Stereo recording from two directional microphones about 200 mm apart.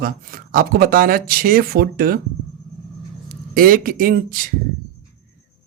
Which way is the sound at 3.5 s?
45° right (ahead or behind).